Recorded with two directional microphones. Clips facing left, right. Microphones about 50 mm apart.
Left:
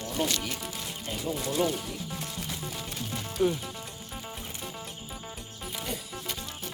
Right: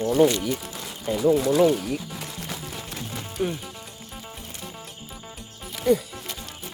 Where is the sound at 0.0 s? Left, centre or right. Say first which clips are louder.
Right 11 dB; right.